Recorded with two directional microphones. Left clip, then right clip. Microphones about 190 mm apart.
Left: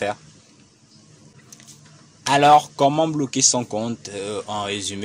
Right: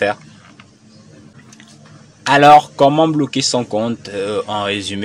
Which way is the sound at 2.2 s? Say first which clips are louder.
Right 6 dB; 30° left (ahead or behind).